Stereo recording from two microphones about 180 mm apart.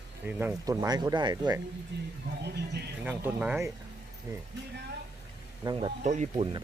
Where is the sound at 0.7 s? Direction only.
20° right (ahead or behind).